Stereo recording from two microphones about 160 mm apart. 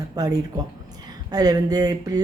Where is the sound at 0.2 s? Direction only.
25° right (ahead or behind).